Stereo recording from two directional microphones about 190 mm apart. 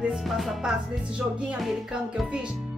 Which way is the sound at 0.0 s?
Centre (ahead or behind).